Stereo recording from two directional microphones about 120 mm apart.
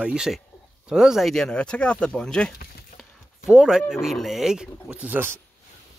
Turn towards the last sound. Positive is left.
turn(degrees=-10)  # may be behind; listen again after turning